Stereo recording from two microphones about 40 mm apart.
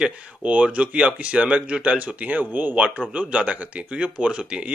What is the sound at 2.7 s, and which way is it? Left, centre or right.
Speech, right.